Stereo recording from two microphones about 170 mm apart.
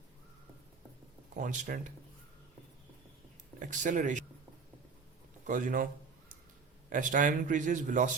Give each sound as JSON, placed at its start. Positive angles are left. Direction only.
{"t": 1.3, "sound": "speech", "side_deg": -50}
{"t": 3.6, "sound": "speech", "side_deg": -50}
{"t": 5.5, "sound": "a sound", "side_deg": -50}
{"t": 6.9, "sound": "speech", "side_deg": -50}